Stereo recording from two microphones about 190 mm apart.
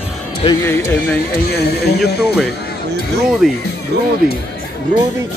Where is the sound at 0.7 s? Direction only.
15° left (ahead or behind).